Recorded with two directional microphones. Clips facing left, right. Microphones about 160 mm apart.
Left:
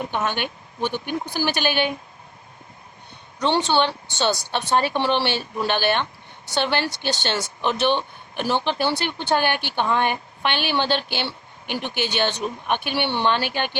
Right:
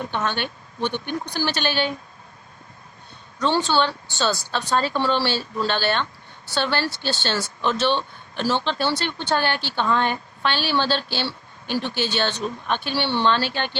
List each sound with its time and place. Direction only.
0.0 s a woman's voice: 10° left (ahead or behind)
3.3 s a woman's voice: 20° left (ahead or behind)